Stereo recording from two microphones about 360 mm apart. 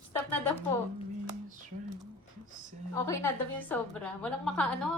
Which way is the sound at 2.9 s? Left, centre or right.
Centre.